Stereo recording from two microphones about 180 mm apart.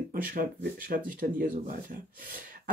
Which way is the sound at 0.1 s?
50° right (ahead or behind).